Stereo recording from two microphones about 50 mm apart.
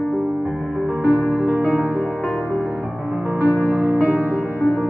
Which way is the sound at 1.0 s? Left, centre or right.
Left.